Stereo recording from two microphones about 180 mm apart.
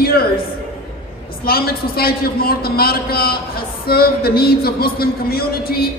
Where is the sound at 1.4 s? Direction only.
55° left (ahead or behind).